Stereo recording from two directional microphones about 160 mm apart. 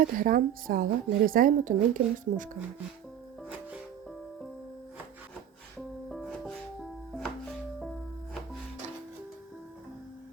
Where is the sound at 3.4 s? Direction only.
10° right (ahead or behind).